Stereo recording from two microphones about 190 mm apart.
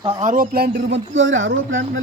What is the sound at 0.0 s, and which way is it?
A man's voice, 35° right (ahead or behind).